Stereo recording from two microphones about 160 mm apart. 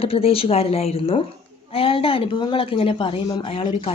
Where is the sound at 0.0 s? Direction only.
35° left (ahead or behind).